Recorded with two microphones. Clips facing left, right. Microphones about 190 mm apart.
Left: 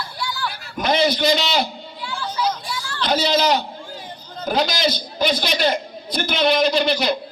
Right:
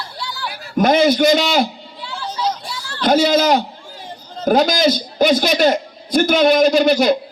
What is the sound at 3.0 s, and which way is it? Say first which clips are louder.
A man's voice: right 6 dB; 50° right (ahead or behind).